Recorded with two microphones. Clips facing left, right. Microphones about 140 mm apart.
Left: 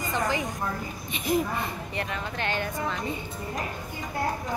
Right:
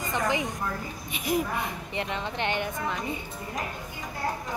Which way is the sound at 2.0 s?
20° right (ahead or behind).